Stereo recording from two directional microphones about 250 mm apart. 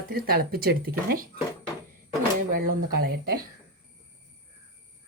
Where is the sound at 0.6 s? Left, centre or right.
Right.